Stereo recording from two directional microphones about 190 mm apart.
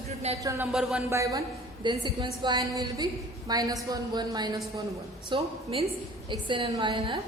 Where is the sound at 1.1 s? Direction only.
15° right (ahead or behind).